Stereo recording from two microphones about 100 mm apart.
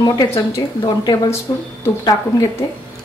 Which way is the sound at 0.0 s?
35° left (ahead or behind).